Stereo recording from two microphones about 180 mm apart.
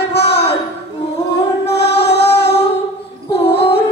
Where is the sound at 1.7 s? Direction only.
70° left (ahead or behind).